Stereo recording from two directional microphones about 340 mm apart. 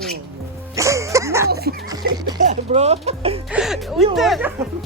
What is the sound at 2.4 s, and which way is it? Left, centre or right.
Speech, centre.